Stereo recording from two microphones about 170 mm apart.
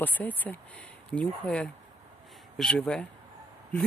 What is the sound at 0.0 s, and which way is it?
Speech, 10° left (ahead or behind).